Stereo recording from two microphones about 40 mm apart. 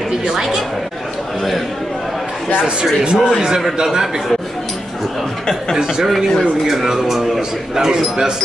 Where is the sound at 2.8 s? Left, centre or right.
Right.